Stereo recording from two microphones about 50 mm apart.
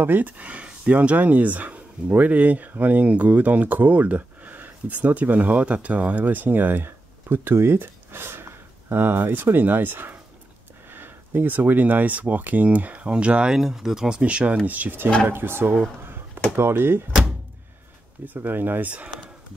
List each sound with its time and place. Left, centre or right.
0.0 s speech: right
13.6 s speech: centre; by 14.6 s right
14.7 s speech: right
18.2 s speech: right